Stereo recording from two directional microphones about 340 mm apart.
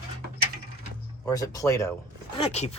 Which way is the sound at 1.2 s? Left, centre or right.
Centre.